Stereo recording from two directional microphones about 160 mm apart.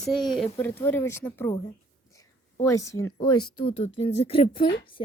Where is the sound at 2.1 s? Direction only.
20° left (ahead or behind).